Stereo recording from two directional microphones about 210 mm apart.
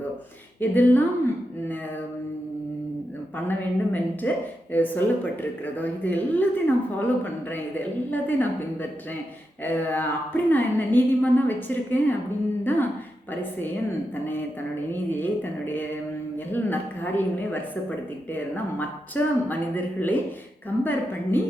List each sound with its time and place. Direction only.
0.6 s a woman's voice: 10° left (ahead or behind)
3.3 s a woman's voice: 10° left (ahead or behind)
15.2 s a woman's voice: 10° left (ahead or behind)